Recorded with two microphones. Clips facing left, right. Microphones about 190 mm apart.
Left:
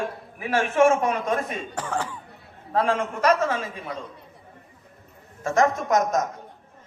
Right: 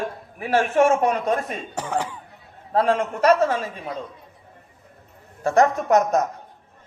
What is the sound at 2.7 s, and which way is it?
A man's voice, 30° right (ahead or behind).